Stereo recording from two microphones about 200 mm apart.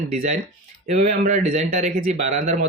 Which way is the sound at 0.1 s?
35° right (ahead or behind).